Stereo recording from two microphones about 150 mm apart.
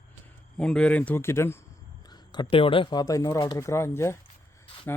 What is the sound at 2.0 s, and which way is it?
Speech, 30° left (ahead or behind).